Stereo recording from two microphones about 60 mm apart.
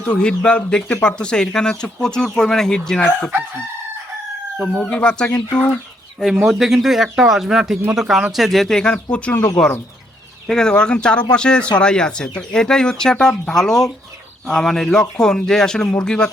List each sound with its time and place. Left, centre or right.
0.0 s speech: centre
4.5 s speech: centre
6.2 s speech: centre; by 9.4 s left
10.4 s speech: centre